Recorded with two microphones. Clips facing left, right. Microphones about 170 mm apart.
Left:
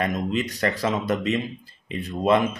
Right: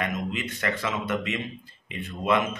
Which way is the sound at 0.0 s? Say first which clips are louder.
Left 5 dB; 35° left (ahead or behind).